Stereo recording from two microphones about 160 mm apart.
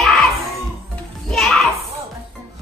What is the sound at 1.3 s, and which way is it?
Children playing, centre (ahead or behind).